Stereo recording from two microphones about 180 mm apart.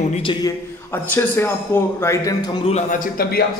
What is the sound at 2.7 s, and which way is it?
Speech, 45° left (ahead or behind).